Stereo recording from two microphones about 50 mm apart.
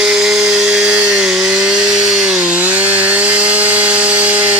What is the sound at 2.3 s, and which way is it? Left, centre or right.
Chainsaw, right.